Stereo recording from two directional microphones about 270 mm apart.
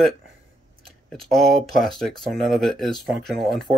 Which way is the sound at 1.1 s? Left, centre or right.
Centre.